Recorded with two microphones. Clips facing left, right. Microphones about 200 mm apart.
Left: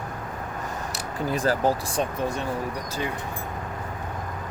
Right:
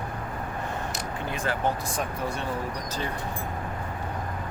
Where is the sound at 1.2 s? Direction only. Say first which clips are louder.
Left 6 dB; 40° left (ahead or behind).